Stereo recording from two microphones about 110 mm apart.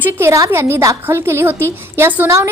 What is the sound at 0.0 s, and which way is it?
A woman's voice, 25° right (ahead or behind).